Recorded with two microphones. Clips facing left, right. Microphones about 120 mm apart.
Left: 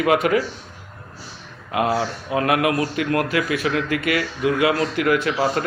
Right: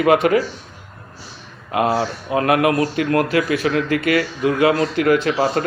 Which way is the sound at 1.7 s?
35° right (ahead or behind).